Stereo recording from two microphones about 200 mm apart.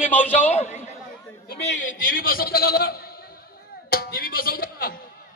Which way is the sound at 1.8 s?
40° left (ahead or behind).